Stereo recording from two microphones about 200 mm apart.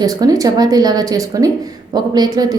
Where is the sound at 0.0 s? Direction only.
20° right (ahead or behind).